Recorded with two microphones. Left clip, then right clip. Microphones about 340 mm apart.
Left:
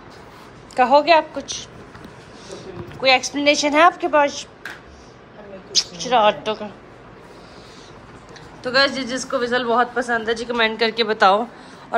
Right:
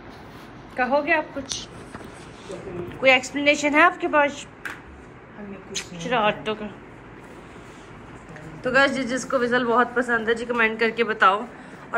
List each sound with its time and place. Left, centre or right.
0.7 s a woman's voice: centre
3.0 s a woman's voice: centre
5.8 s a woman's voice: centre
8.6 s a woman's voice: centre